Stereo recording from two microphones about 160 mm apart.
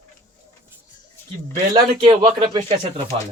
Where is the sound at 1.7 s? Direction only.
25° right (ahead or behind).